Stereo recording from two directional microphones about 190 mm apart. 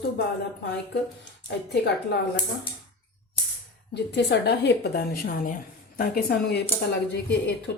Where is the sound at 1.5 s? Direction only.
60° left (ahead or behind).